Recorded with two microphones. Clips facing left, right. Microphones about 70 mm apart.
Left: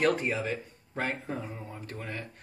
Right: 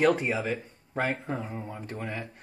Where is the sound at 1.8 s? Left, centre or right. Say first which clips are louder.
Right 2 dB; centre.